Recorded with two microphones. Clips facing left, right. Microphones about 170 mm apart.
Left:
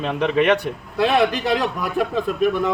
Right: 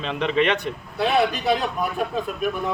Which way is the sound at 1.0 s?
90° left.